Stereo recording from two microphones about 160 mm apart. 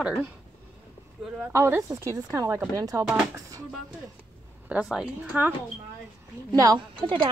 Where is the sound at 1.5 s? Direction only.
15° right (ahead or behind).